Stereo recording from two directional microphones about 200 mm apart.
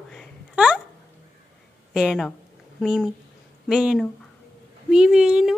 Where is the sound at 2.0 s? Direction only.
Centre (ahead or behind).